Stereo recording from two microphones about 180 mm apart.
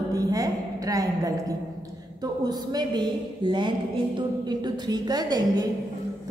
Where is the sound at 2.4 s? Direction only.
20° right (ahead or behind).